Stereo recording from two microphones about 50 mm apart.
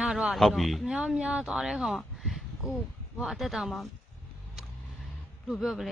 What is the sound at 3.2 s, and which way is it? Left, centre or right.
Speech, centre.